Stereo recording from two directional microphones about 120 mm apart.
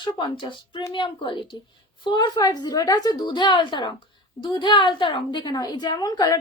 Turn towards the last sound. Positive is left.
turn(degrees=35)  # may be behind; listen again after turning